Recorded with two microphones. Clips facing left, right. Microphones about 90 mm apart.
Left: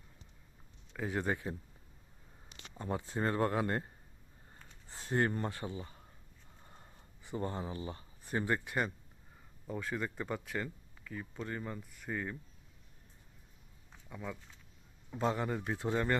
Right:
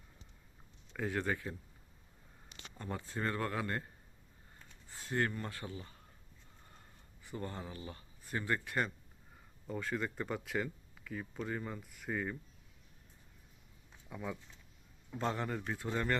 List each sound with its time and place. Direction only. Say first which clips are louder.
1.1 s speech: left 3 dB; 20° left (ahead or behind)
2.7 s speech: left 4 dB; 20° left (ahead or behind)
4.9 s a sound: left 3 dB; 30° left (ahead or behind)
5.4 s speech: left 5 dB; 25° left (ahead or behind)
6.7 s a sound: left 2 dB; 20° left (ahead or behind)
9.6 s speech: even; centre (ahead or behind)
14.1 s a man's voice: right 1 dB; 5° right (ahead or behind)